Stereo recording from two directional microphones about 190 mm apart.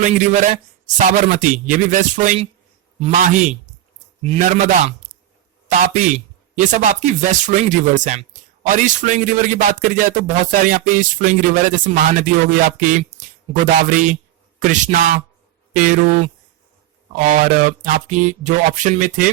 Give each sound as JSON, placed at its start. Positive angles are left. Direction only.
{"t": 0.0, "sound": "speech", "side_deg": -40}